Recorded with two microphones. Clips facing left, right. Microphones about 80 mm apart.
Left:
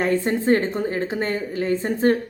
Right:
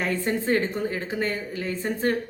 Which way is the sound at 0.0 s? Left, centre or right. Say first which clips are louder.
Left 5 dB; left.